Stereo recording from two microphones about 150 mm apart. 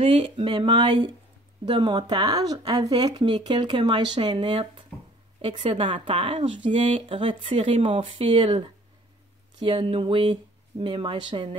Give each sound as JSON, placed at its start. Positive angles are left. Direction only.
{"t": 0.0, "sound": "speech", "side_deg": -35}